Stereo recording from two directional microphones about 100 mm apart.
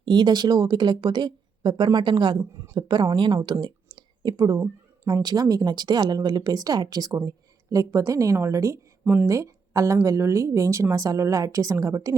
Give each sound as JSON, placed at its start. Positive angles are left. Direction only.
{"t": 0.0, "sound": "speech", "side_deg": -50}
{"t": 2.4, "sound": "speech", "side_deg": -25}
{"t": 2.7, "sound": "a woman's voice", "side_deg": -50}